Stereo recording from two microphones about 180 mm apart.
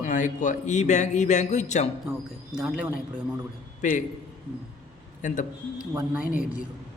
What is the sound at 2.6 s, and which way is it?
Speech, 5° right (ahead or behind).